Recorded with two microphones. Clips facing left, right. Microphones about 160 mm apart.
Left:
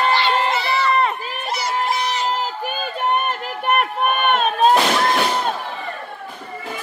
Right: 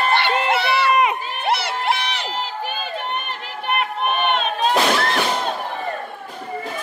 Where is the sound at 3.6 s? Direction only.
50° left (ahead or behind).